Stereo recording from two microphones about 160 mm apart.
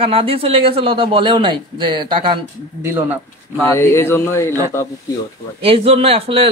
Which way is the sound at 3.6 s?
15° left (ahead or behind).